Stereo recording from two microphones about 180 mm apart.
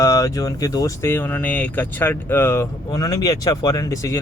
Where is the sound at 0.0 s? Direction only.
15° left (ahead or behind).